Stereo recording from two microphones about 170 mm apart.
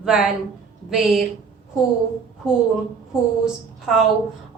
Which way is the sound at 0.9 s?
Centre (ahead or behind).